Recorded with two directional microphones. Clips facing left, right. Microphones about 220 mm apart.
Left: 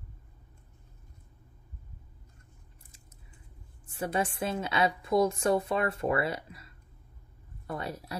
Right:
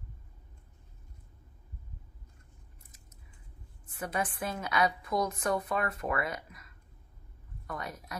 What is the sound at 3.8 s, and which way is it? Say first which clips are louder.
A woman's voice: left 4 dB; 30° left (ahead or behind).